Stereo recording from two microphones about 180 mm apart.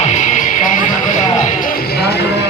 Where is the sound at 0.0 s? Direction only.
40° left (ahead or behind).